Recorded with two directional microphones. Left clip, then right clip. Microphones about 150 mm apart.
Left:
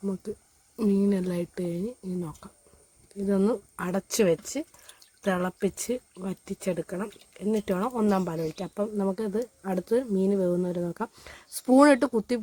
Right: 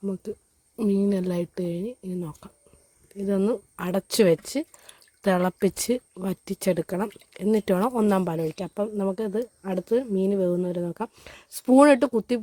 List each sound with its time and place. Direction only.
0.0 s speech: 15° right (ahead or behind)